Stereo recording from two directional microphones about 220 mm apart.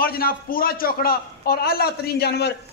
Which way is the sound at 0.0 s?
45° left (ahead or behind).